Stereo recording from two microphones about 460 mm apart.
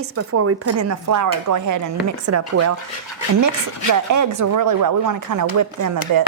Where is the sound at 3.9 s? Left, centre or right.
Right.